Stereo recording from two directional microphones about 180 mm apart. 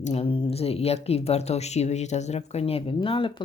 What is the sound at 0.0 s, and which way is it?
Speech, 35° left (ahead or behind).